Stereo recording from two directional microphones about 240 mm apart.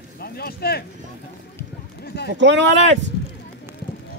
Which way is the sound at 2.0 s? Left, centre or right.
Left.